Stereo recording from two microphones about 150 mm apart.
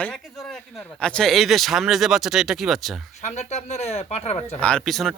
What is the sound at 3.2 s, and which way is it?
Speech, 50° left (ahead or behind).